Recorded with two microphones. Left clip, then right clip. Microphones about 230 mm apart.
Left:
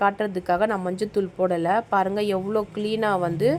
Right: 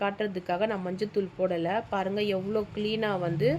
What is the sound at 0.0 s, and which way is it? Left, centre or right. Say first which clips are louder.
A woman's voice: left 7 dB; centre.